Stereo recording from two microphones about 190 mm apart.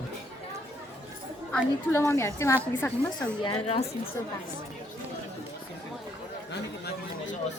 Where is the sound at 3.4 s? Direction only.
30° left (ahead or behind).